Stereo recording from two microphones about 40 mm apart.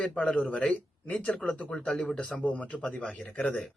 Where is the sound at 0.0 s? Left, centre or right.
Left.